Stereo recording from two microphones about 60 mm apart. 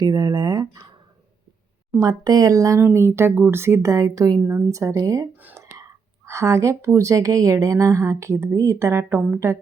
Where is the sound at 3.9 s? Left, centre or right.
Right.